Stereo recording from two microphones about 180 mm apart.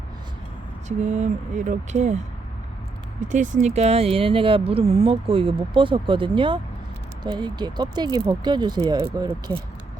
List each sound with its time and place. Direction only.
0.9 s speech: 40° right (ahead or behind); by 9.3 s 15° right (ahead or behind)